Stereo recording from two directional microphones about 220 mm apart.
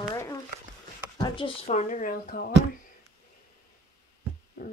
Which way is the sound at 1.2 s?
25° left (ahead or behind).